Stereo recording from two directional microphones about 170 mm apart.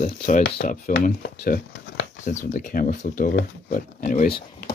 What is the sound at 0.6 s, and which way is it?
Speech, 50° left (ahead or behind).